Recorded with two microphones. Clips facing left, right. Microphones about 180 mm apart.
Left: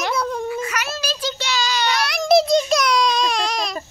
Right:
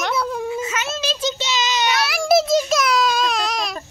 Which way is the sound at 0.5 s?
25° right (ahead or behind).